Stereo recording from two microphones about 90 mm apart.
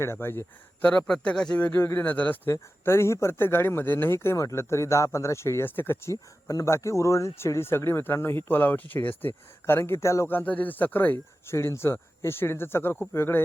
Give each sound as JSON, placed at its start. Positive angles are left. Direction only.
{"t": 0.0, "sound": "speech", "side_deg": 25}
{"t": 2.5, "sound": "speech", "side_deg": 30}